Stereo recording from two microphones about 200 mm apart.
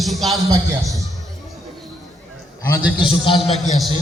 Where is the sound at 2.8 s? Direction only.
5° right (ahead or behind).